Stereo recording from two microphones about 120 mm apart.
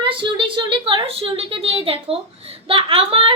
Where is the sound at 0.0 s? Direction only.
45° right (ahead or behind).